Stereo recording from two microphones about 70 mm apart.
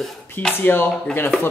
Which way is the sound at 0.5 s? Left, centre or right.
Left.